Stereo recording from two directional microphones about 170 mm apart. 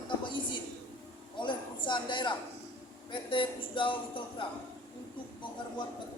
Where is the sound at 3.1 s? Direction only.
30° left (ahead or behind).